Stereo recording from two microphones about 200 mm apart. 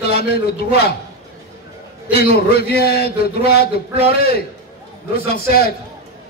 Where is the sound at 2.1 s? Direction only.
50° left (ahead or behind).